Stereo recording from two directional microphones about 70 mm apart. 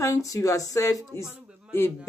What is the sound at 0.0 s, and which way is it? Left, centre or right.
Speech, left.